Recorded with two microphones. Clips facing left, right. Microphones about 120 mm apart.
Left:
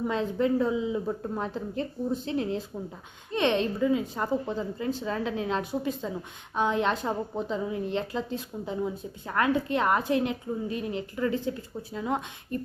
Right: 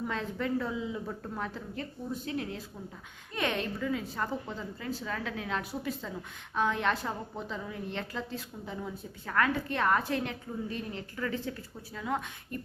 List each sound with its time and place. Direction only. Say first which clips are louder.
0.1 s a woman's voice: left 8 dB; 20° left (ahead or behind)